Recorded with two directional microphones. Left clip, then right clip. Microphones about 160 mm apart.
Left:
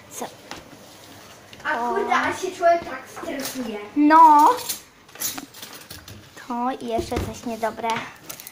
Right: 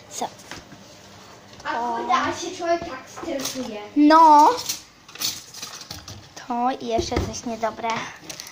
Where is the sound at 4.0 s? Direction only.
25° right (ahead or behind).